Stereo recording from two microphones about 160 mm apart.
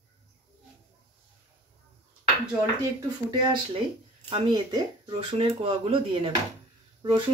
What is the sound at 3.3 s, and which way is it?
Speech, 25° right (ahead or behind).